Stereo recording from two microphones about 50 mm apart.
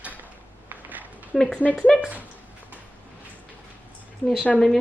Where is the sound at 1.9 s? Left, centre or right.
Centre.